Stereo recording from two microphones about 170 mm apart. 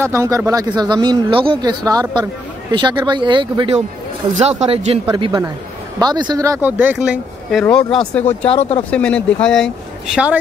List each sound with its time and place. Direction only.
0.0 s a man's voice: 15° right (ahead or behind); by 5.0 s 40° right (ahead or behind)
5.1 s a man's voice: 25° right (ahead or behind); by 7.6 s 5° right (ahead or behind)
7.6 s speech: 5° left (ahead or behind)
8.5 s speech: 35° left (ahead or behind)
8.9 s speech: 5° left (ahead or behind)
10.1 s speech: 5° right (ahead or behind)